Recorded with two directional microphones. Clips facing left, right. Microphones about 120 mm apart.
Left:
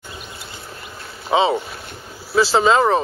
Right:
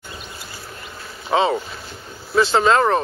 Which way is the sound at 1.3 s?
5° left (ahead or behind).